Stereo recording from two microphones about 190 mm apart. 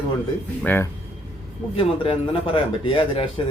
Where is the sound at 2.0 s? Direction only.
25° left (ahead or behind).